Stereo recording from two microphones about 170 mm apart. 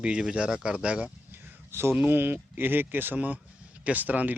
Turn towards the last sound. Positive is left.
turn(degrees=-10)  # may be behind; listen again after turning